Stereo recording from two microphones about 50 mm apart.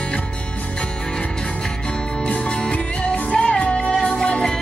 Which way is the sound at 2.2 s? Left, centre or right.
Left.